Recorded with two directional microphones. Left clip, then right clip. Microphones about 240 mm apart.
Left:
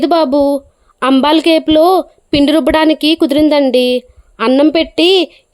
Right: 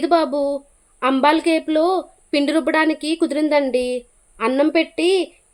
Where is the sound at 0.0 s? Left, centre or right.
Left.